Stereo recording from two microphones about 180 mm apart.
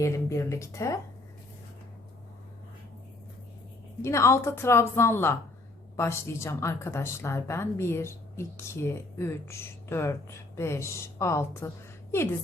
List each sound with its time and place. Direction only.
0.0 s speech: 15° left (ahead or behind)
4.0 s speech: 15° left (ahead or behind)